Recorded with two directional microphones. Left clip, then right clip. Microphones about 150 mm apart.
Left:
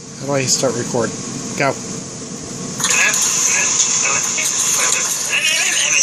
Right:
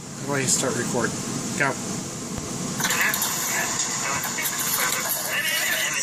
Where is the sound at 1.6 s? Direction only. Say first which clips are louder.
Left 6 dB; 40° left (ahead or behind).